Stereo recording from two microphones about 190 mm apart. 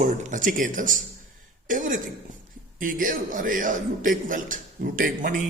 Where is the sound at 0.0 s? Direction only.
40° right (ahead or behind).